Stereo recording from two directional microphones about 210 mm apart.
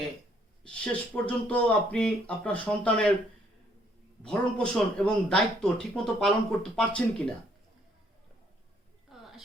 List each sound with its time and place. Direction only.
0.6 s speech: 5° left (ahead or behind)
4.2 s a man's voice: 5° left (ahead or behind)
9.1 s a sound: centre (ahead or behind)